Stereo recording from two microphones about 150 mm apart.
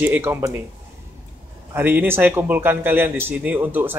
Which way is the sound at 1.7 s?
15° right (ahead or behind).